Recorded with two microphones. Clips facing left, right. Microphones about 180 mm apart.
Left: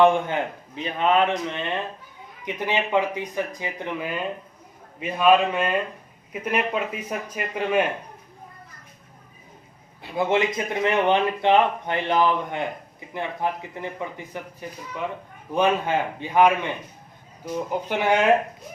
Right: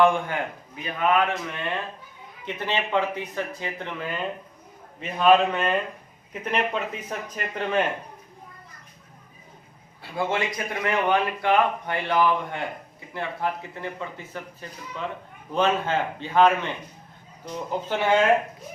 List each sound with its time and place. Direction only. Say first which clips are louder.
0.0 s a man's voice: left 2 dB; 20° left (ahead or behind)
10.0 s a man's voice: left 4 dB; 20° left (ahead or behind)